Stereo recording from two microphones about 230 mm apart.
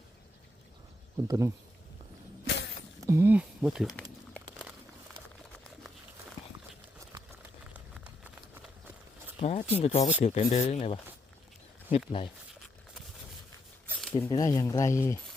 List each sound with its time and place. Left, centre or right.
1.3 s speech: centre
3.0 s speech: centre
4.4 s a sound: centre
7.7 s a sound: centre
9.4 s speech: left
13.8 s zipper: centre
14.2 s speech: centre